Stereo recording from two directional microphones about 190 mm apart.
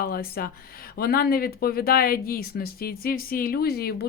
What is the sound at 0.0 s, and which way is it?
Speech, 50° left (ahead or behind).